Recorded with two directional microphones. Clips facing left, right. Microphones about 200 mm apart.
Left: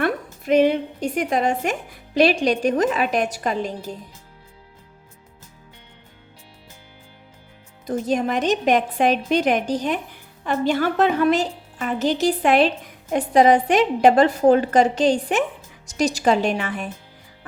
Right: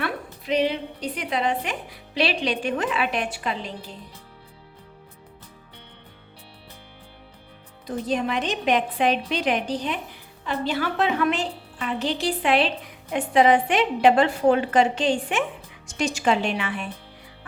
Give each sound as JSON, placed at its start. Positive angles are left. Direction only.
{"t": 0.0, "sound": "a woman's voice", "side_deg": 50}
{"t": 7.9, "sound": "a woman's voice", "side_deg": 45}